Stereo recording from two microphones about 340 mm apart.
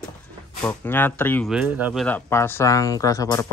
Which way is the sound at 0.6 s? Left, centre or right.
Centre.